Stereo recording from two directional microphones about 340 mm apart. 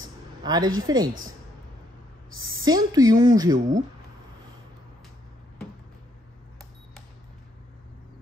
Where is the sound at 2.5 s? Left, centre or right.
Centre.